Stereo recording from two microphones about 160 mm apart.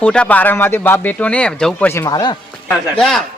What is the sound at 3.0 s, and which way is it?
Speech, 5° left (ahead or behind).